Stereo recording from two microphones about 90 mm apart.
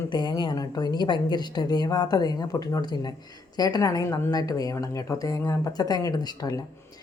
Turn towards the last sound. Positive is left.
turn(degrees=45)  # may be behind; listen again after turning